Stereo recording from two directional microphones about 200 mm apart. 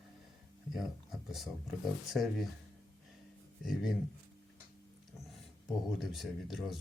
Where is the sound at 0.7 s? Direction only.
Centre (ahead or behind).